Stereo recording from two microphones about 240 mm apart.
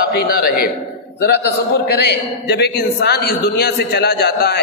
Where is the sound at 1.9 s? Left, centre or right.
Left.